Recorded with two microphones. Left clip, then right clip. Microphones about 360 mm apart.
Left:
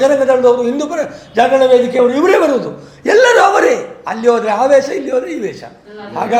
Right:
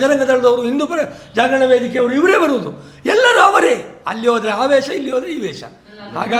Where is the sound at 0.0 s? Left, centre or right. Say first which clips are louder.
Left 3 dB; right.